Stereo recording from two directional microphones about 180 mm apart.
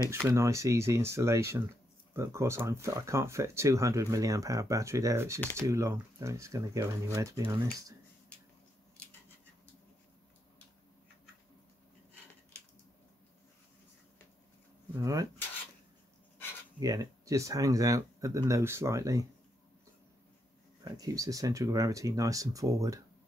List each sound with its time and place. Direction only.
0.1 s speech: 15° right (ahead or behind)
15.0 s speech: 20° right (ahead or behind)
16.8 s speech: 20° right (ahead or behind)
20.8 s speech: 20° right (ahead or behind)